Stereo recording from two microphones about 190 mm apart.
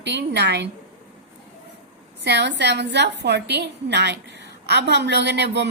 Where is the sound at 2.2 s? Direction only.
65° right (ahead or behind).